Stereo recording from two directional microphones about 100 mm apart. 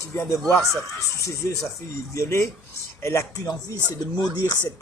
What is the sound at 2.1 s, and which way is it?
Speech, 25° left (ahead or behind).